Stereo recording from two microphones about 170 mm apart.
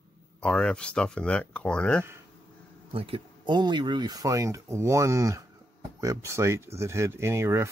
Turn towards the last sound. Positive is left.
turn(degrees=-15)  # may be behind; listen again after turning